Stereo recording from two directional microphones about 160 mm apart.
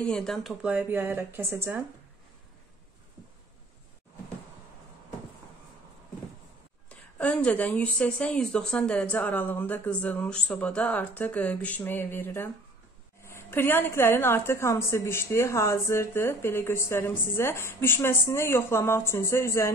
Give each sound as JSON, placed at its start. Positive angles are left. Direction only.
{"t": 0.0, "sound": "speech", "side_deg": 5}
{"t": 6.9, "sound": "a woman's voice", "side_deg": 10}